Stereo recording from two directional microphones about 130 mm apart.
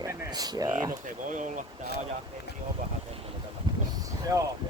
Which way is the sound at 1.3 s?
75° right (ahead or behind).